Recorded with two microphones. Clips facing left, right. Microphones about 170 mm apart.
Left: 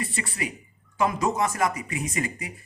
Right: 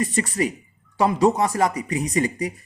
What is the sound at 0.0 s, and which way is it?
Speech, 40° right (ahead or behind).